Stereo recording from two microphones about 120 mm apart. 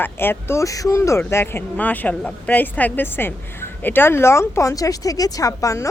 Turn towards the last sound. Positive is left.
turn(degrees=25)  # may be behind; listen again after turning